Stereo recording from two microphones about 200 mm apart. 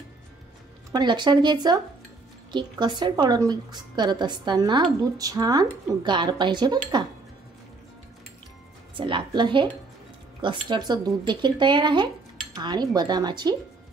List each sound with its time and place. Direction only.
0.9 s a woman's voice: 20° right (ahead or behind)
8.9 s a woman's voice: 25° right (ahead or behind)